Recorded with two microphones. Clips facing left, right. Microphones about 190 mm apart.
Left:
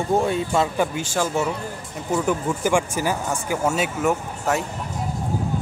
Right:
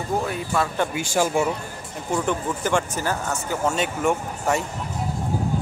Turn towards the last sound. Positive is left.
turn(degrees=0)  # may be behind; listen again after turning